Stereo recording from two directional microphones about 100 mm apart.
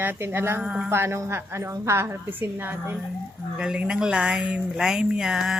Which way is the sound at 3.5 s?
10° right (ahead or behind).